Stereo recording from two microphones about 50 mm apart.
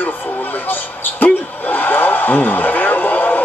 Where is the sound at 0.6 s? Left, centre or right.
Left.